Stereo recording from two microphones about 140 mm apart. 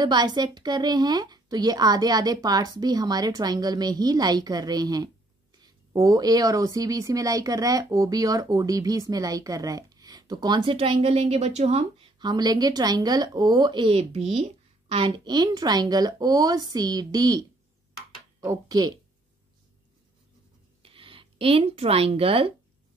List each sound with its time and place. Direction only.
0.0 s speech: 30° right (ahead or behind); by 12.1 s 50° right (ahead or behind)
12.2 s speech: 30° right (ahead or behind)
20.8 s speech: 40° right (ahead or behind)